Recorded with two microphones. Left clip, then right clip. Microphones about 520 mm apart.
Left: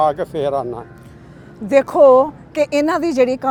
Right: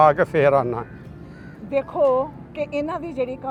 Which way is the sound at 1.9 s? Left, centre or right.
Left.